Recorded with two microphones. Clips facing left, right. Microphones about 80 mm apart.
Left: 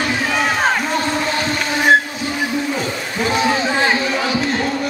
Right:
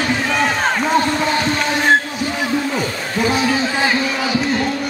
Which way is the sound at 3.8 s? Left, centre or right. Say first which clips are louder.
Left 1 dB; centre.